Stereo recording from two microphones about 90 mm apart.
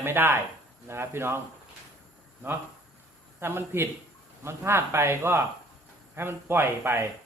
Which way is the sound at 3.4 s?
25° right (ahead or behind).